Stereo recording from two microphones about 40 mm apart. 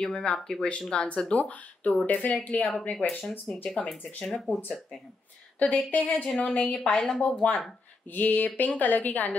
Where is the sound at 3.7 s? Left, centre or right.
Left.